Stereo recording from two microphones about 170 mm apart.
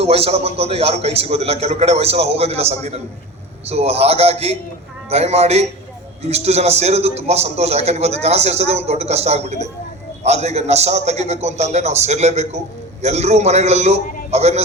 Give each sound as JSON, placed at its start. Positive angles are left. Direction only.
{"t": 0.0, "sound": "a man's voice", "side_deg": -35}